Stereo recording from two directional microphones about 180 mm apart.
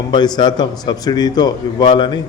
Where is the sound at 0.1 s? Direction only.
25° left (ahead or behind).